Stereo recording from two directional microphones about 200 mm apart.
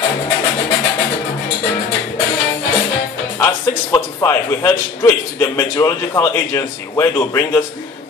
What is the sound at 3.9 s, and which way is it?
A man's voice, 15° left (ahead or behind).